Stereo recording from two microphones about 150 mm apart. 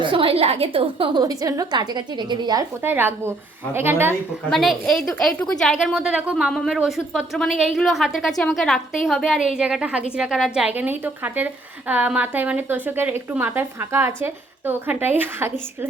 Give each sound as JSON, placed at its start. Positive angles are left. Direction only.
{"t": 0.0, "sound": "a woman's voice", "side_deg": -35}
{"t": 2.8, "sound": "a woman's voice", "side_deg": -15}
{"t": 4.4, "sound": "a woman's voice", "side_deg": 0}